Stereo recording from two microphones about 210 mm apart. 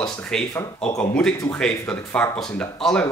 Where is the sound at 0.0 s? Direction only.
5° left (ahead or behind).